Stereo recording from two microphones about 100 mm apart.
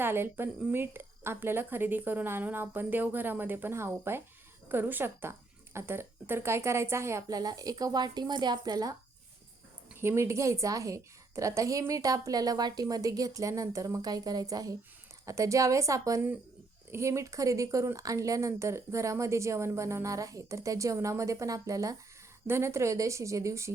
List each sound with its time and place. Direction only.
0.0 s a woman's voice: 20° right (ahead or behind); by 9.0 s 40° right (ahead or behind)
10.0 s a woman's voice: 25° right (ahead or behind)